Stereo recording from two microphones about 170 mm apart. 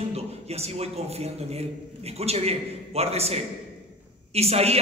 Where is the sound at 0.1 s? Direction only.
35° right (ahead or behind).